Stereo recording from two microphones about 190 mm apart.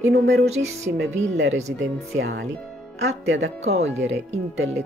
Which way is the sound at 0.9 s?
85° right.